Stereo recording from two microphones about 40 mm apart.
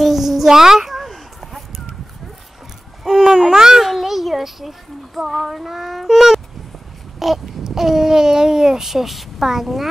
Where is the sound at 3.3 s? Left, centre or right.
Centre.